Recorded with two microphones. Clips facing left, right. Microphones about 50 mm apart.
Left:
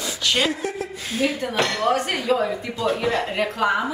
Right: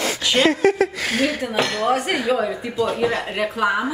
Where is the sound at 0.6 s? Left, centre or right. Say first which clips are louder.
Right 10 dB; right.